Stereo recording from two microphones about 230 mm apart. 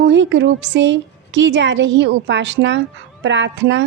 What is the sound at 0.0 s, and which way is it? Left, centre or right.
A woman's voice, right.